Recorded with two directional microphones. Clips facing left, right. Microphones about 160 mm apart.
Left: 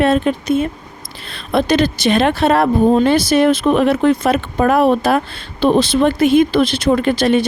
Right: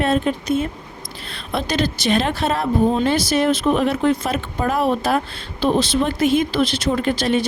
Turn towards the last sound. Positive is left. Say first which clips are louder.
# left 5 dB
turn(degrees=65)  # may be behind; listen again after turning